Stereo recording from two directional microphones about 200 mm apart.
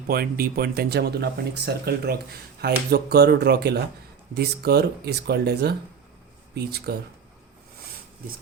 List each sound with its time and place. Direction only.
0.1 s speech: 50° right (ahead or behind)